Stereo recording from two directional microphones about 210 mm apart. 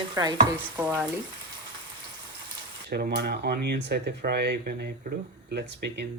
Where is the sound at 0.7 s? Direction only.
5° right (ahead or behind).